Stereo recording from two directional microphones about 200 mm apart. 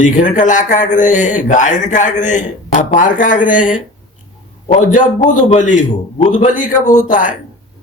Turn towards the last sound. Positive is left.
turn(degrees=40)  # may be behind; listen again after turning